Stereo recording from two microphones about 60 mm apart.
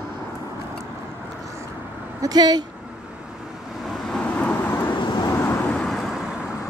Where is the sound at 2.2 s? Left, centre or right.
Right.